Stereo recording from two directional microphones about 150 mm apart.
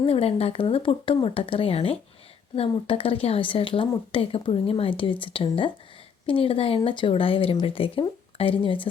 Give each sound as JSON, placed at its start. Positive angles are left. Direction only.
{"t": 0.0, "sound": "speech", "side_deg": 40}